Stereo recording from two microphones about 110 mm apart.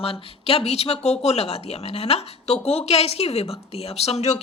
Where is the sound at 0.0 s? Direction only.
60° left (ahead or behind).